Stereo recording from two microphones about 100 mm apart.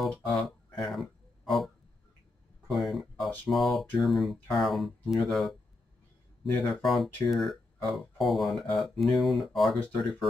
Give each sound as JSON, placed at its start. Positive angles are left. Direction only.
{"t": 0.0, "sound": "music", "side_deg": 0}
{"t": 2.7, "sound": "a sound", "side_deg": 0}
{"t": 3.4, "sound": "speech", "side_deg": 0}
{"t": 6.7, "sound": "speech", "side_deg": 0}
{"t": 9.8, "sound": "speech", "side_deg": 15}